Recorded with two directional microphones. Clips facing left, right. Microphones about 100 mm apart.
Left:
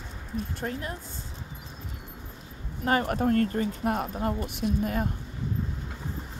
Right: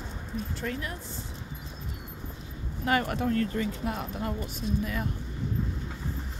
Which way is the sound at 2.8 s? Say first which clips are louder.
Left 2 dB; 35° left (ahead or behind).